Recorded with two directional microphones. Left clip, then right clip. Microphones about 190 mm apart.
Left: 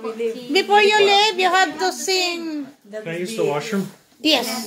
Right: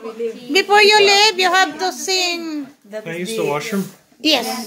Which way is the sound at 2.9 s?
35° right (ahead or behind).